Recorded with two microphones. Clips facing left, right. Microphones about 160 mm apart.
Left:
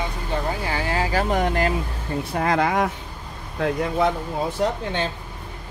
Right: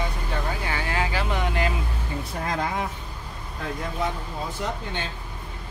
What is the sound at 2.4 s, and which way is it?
Speech, 75° left (ahead or behind).